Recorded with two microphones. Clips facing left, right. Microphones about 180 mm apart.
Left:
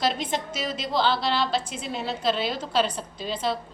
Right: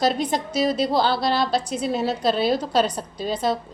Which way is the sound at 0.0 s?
40° right (ahead or behind).